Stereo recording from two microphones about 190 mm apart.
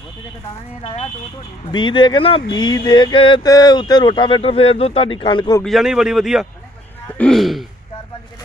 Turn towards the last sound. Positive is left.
turn(degrees=0)  # may be behind; listen again after turning